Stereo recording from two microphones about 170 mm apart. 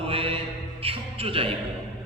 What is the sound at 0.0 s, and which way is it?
Mantra, 35° right (ahead or behind).